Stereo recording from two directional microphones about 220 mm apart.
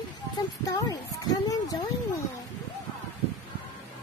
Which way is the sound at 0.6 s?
15° left (ahead or behind).